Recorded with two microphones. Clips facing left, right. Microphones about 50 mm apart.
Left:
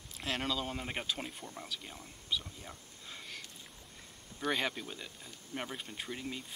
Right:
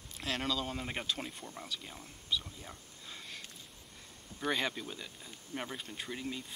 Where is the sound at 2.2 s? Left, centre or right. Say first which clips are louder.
Right 1 dB; centre.